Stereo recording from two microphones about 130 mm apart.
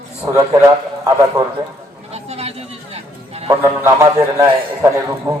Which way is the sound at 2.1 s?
55° right (ahead or behind).